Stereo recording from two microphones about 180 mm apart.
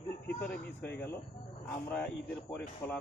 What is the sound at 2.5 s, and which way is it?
Speech, 10° left (ahead or behind).